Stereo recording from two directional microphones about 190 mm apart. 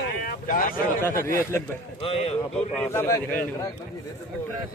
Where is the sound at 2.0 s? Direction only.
30° left (ahead or behind).